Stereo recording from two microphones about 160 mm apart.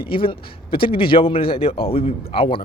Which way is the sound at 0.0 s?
35° left (ahead or behind).